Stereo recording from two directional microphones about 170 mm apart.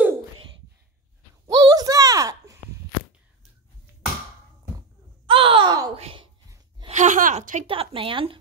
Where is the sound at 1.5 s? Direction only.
20° right (ahead or behind).